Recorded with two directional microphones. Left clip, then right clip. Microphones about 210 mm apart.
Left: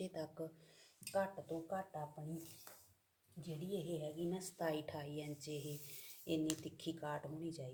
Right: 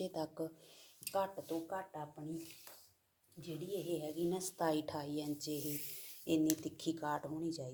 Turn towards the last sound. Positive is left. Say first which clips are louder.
# right 6 dB
turn(degrees=-20)  # may be behind; listen again after turning